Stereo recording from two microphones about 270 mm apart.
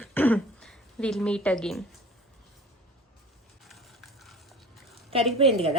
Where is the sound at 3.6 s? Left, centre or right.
Centre.